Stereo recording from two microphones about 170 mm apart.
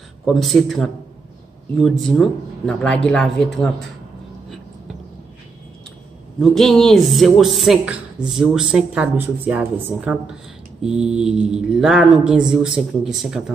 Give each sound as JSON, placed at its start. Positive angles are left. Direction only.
{"t": 0.2, "sound": "speech", "side_deg": 0}
{"t": 6.4, "sound": "speech", "side_deg": 0}